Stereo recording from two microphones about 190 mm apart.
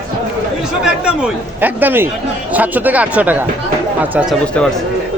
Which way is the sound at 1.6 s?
10° right (ahead or behind).